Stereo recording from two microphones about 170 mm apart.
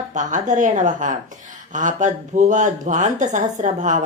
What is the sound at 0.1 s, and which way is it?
Speech, 45° right (ahead or behind).